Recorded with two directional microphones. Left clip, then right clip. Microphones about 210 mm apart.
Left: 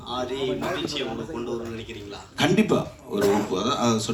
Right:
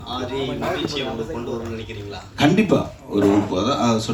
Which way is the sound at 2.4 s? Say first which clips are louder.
Right 4 dB; 45° left (ahead or behind).